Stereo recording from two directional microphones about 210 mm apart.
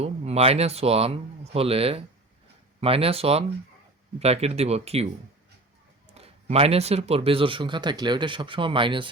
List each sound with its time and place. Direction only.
0.0 s speech: 30° right (ahead or behind)
6.1 s speech: 30° right (ahead or behind)